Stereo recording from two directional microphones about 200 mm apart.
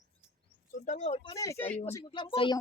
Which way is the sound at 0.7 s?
40° left (ahead or behind).